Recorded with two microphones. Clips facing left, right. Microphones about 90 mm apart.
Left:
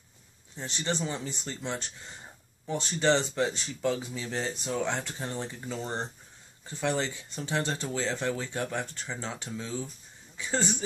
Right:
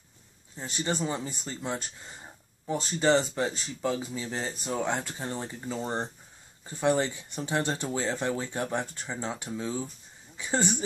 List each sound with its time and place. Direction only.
0.6 s speech: 10° right (ahead or behind)